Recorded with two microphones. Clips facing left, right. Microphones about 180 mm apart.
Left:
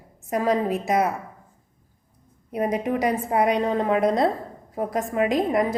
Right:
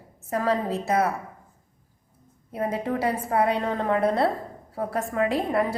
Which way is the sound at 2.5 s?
15° left (ahead or behind).